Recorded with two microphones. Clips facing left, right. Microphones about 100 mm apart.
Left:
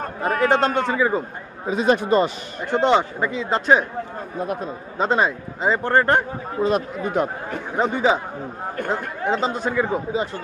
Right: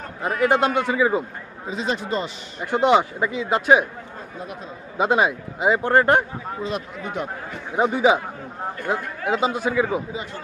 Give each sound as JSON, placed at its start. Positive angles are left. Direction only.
{"t": 0.0, "sound": "a sound", "side_deg": 50}
{"t": 0.4, "sound": "speech", "side_deg": -10}
{"t": 1.7, "sound": "speech", "side_deg": 55}
{"t": 2.6, "sound": "speech", "side_deg": -10}
{"t": 4.9, "sound": "speech", "side_deg": -10}
{"t": 6.6, "sound": "speech", "side_deg": 45}
{"t": 7.7, "sound": "speech", "side_deg": -10}